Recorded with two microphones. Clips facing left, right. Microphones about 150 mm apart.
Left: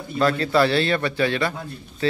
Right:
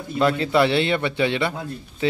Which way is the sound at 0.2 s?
20° right (ahead or behind).